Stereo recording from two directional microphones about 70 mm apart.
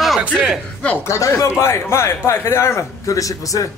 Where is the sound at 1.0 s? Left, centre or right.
Left.